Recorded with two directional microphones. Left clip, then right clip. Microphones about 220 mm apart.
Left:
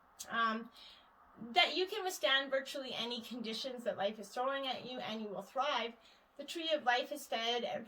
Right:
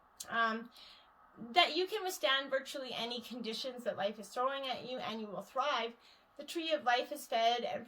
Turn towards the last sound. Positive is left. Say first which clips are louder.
# right 4 dB
turn(degrees=-30)  # may be behind; listen again after turning